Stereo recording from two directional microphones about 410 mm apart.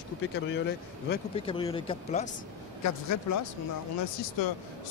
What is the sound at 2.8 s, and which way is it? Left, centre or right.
Speech, left.